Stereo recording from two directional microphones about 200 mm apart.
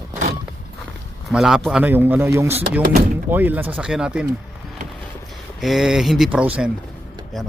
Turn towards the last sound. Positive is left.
turn(degrees=0)  # may be behind; listen again after turning